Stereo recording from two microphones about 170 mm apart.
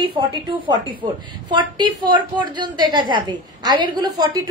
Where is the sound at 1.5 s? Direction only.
25° right (ahead or behind).